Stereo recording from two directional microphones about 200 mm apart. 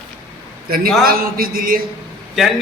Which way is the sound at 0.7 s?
45° right (ahead or behind).